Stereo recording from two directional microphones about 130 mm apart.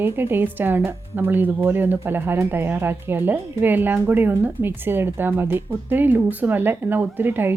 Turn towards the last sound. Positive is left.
turn(degrees=-15)  # may be behind; listen again after turning